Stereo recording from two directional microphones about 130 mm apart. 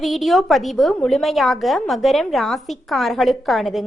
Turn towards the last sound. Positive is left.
turn(degrees=0)  # may be behind; listen again after turning